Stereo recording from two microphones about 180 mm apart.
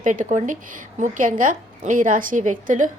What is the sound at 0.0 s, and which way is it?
A woman's voice, 45° right (ahead or behind).